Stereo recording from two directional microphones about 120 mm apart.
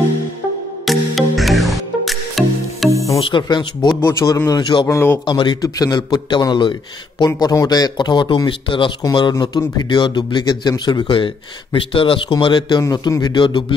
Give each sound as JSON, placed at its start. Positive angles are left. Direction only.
{"t": 0.8, "sound": "music", "side_deg": 0}
{"t": 3.2, "sound": "speech", "side_deg": 45}
{"t": 4.0, "sound": "speech", "side_deg": 25}
{"t": 5.2, "sound": "speech", "side_deg": 40}